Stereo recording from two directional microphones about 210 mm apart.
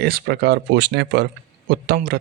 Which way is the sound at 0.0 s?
50° right (ahead or behind).